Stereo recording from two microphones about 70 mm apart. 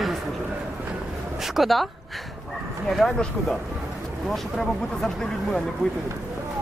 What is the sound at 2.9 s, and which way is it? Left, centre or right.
Speech, centre.